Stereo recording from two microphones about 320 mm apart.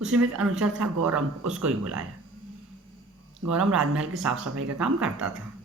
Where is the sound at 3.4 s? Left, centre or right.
Right.